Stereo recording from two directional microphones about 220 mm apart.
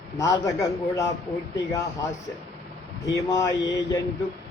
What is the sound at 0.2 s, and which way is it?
Speech, 15° left (ahead or behind).